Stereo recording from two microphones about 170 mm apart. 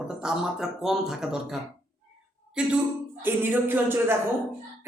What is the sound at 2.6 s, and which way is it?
A man's voice, 5° right (ahead or behind).